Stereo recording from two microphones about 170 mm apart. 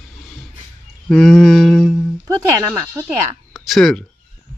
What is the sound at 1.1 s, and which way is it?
Speech, 5° left (ahead or behind).